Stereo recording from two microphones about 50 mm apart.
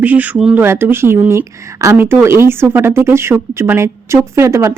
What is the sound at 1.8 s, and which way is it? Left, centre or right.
Speech, right.